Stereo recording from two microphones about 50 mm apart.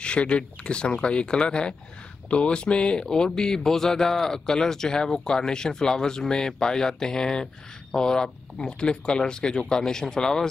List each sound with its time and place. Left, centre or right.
0.0 s speech: left